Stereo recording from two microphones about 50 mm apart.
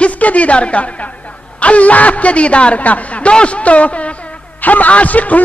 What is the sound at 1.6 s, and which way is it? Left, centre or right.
A man's voice, left.